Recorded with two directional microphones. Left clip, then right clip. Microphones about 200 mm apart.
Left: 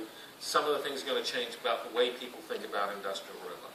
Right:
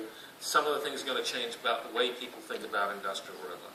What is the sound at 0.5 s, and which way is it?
Speech, 35° left (ahead or behind).